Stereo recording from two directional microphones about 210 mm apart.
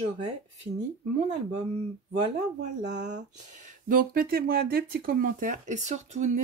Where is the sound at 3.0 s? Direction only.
35° right (ahead or behind).